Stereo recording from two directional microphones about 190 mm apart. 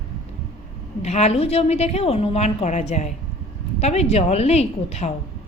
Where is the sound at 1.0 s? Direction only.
35° left (ahead or behind).